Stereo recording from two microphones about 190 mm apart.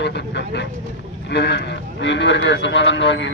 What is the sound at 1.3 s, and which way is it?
A man's voice, 65° left (ahead or behind).